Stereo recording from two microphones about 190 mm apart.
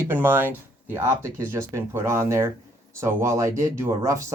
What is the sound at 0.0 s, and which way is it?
Speech, 10° right (ahead or behind).